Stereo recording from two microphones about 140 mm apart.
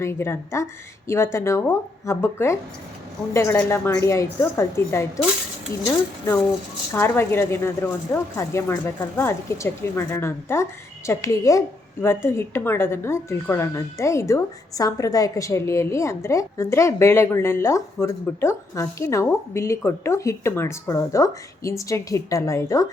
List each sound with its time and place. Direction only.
0.0 s a woman's voice: 15° left (ahead or behind)
6.9 s a woman's voice: 15° left (ahead or behind)